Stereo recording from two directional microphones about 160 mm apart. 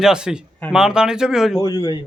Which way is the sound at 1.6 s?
25° left (ahead or behind).